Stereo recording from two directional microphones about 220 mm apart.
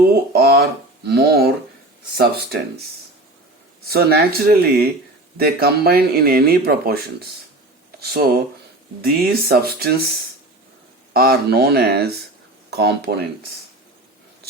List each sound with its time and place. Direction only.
0.1 s speech: 45° right (ahead or behind)
3.8 s speech: 45° right (ahead or behind)
11.1 s speech: 45° right (ahead or behind)